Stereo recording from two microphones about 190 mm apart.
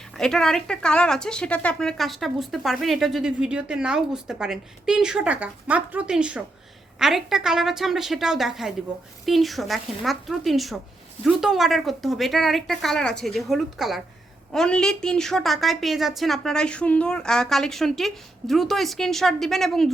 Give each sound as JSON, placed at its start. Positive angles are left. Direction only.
{"t": 0.2, "sound": "speech", "side_deg": 0}